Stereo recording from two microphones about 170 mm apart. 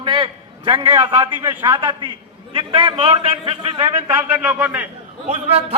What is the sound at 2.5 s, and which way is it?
A man's voice, 30° right (ahead or behind).